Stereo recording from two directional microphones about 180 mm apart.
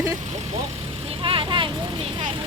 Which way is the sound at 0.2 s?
40° right (ahead or behind).